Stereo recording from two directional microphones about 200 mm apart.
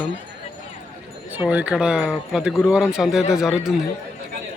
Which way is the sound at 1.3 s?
10° right (ahead or behind).